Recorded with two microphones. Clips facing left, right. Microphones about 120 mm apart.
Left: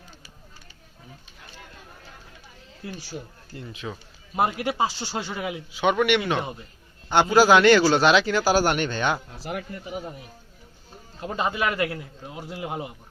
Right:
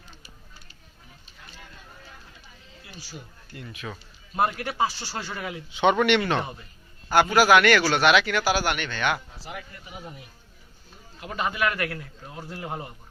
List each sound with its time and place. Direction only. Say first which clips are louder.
3.5 s a man's voice: left 2 dB; 30° left (ahead or behind)
5.7 s a man's voice: right 1 dB; 5° left (ahead or behind)
7.1 s a man's voice: left 1 dB; 30° left (ahead or behind)
9.4 s speech: left 7 dB; 55° left (ahead or behind)
11.2 s a man's voice: left 1 dB; 25° left (ahead or behind)